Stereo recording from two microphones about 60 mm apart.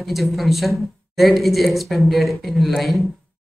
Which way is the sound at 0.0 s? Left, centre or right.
Centre.